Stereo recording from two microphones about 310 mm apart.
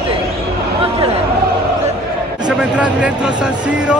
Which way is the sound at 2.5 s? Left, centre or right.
Centre.